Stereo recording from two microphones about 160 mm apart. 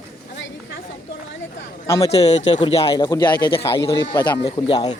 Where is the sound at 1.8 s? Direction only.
15° left (ahead or behind).